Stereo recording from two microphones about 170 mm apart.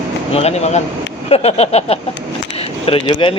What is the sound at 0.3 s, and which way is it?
Speech, 40° left (ahead or behind).